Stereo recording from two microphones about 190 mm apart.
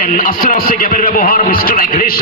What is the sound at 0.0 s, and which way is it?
A man's voice, 50° left (ahead or behind).